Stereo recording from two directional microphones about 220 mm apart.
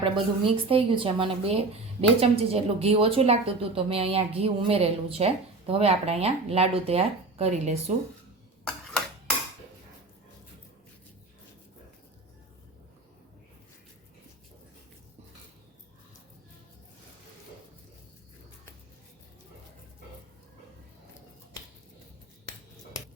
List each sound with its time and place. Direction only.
0.0 s speech: 25° right (ahead or behind)